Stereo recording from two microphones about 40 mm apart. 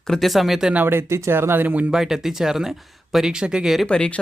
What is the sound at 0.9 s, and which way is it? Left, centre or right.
Speech, right.